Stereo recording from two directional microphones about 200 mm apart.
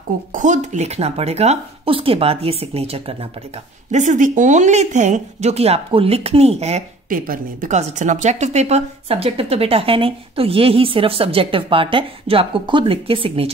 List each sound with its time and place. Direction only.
0.3 s a woman's voice: 40° right (ahead or behind)